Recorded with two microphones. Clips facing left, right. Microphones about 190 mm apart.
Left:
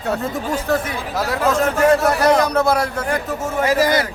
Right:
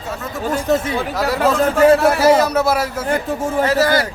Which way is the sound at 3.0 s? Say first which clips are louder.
Right 3 dB; 30° right (ahead or behind).